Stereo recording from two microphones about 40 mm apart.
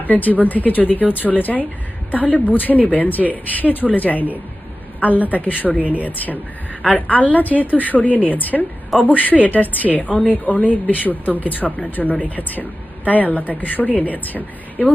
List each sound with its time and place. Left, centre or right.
0.0 s a woman's voice: left